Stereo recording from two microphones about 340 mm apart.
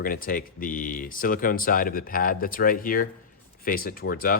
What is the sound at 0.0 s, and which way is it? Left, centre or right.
A man's voice, left.